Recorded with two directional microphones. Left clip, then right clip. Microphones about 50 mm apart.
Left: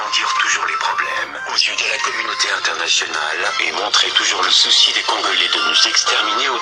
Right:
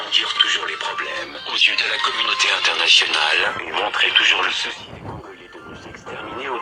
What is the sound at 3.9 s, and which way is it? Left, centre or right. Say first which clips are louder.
Speech: even; centre.